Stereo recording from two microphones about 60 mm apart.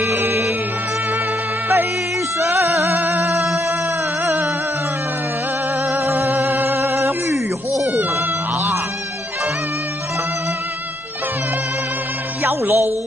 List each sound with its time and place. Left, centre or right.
0.0 s music: right
2.3 s music: right
2.6 s music: right
5.9 s music: right
6.1 s cat: right
12.4 s music: right